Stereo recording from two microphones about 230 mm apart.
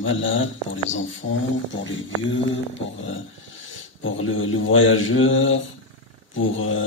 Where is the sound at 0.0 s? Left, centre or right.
Left.